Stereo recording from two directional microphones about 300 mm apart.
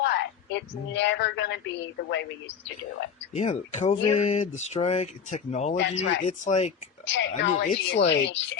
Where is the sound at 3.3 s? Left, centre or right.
Left.